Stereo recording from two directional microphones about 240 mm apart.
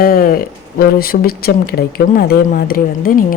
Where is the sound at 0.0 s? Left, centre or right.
Left.